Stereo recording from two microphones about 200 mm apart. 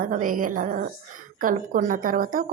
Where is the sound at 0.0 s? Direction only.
45° right (ahead or behind).